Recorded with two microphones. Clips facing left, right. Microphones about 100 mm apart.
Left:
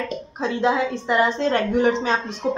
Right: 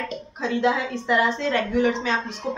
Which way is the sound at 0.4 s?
25° left (ahead or behind).